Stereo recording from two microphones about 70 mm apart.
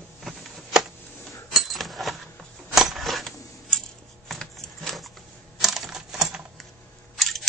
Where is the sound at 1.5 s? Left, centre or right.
Centre.